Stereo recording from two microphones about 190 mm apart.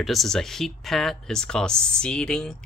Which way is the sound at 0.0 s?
Centre (ahead or behind).